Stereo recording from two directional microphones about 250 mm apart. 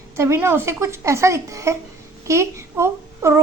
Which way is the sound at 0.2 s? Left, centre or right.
Centre.